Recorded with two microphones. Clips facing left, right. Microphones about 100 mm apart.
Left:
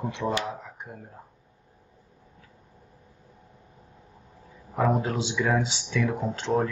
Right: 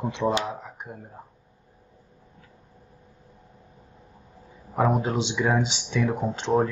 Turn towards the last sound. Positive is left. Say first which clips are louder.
# right 3 dB
turn(degrees=-20)  # may be behind; listen again after turning